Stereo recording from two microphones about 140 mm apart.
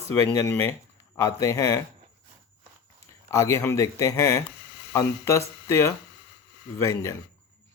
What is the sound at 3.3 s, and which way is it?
Speech, 25° left (ahead or behind).